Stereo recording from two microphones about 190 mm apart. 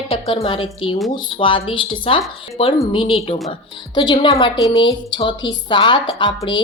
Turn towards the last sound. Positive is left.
turn(degrees=25)  # may be behind; listen again after turning